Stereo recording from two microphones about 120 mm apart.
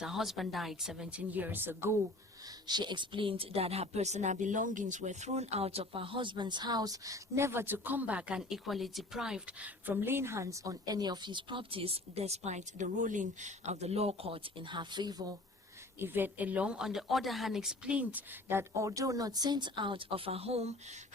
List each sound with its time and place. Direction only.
0.0 s speech: 5° right (ahead or behind)
2.6 s speech: 35° right (ahead or behind)
16.0 s a woman's voice: 15° right (ahead or behind); by 20.7 s 60° right (ahead or behind)